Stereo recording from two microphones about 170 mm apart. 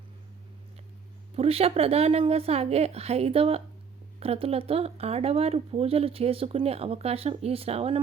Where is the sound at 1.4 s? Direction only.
35° right (ahead or behind).